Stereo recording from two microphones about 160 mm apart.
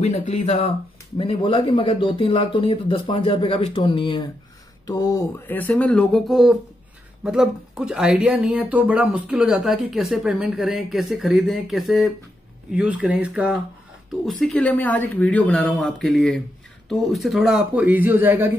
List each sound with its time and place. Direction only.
0.3 s speech: 40° left (ahead or behind); by 5.4 s 20° left (ahead or behind)
5.5 s speech: 10° left (ahead or behind); by 18.5 s 10° right (ahead or behind)